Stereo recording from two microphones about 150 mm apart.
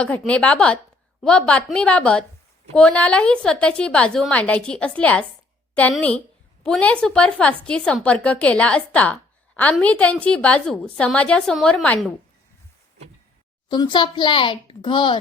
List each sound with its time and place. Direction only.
0.2 s a woman's voice: 10° left (ahead or behind)
13.7 s a child's voice: 30° left (ahead or behind)